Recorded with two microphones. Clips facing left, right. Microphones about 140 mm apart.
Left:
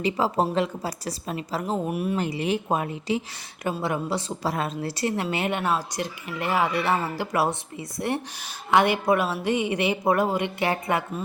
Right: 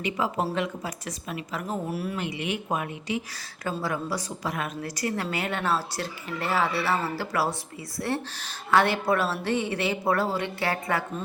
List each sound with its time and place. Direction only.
0.0 s a woman's voice: 35° left (ahead or behind)
1.9 s a woman's voice: 20° left (ahead or behind)
2.1 s a woman's voice: 35° left (ahead or behind); by 11.0 s 20° left (ahead or behind)